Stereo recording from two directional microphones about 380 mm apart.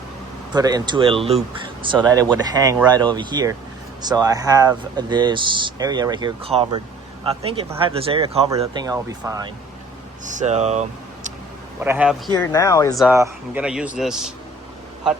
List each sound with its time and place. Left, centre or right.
0.5 s speech: centre
11.8 s speech: centre
12.5 s speech: centre
13.1 s speech: centre